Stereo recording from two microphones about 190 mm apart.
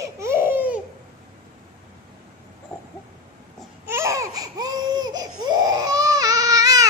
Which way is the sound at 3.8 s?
15° right (ahead or behind).